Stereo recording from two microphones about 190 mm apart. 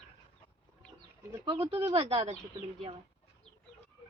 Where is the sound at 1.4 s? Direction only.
30° right (ahead or behind).